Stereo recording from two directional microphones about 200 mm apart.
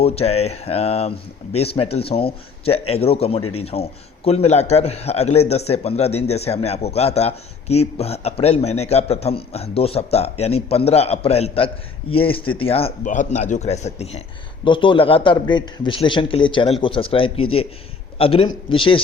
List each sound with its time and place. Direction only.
0.0 s a man's voice: 30° left (ahead or behind)